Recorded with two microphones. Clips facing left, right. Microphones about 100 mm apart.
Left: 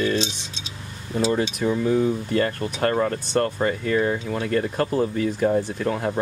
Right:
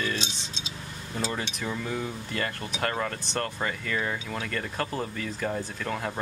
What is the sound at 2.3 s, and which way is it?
Speech, 40° left (ahead or behind).